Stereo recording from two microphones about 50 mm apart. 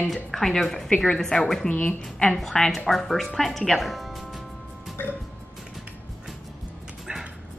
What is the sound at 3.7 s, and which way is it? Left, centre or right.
Music, centre.